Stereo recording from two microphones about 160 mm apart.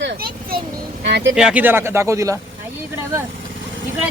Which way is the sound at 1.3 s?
5° right (ahead or behind).